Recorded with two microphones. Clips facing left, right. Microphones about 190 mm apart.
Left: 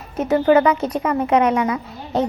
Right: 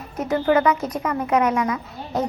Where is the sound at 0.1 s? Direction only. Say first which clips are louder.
Left 4 dB; 25° left (ahead or behind).